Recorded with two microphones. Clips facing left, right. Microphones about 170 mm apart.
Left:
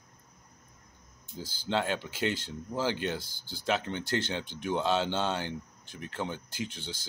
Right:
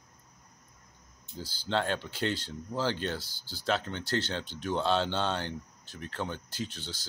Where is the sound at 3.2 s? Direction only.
50° left (ahead or behind).